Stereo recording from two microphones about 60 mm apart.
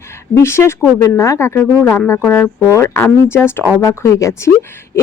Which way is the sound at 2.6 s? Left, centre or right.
Left.